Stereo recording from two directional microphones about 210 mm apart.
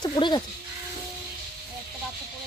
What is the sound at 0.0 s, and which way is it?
Speech, 20° left (ahead or behind).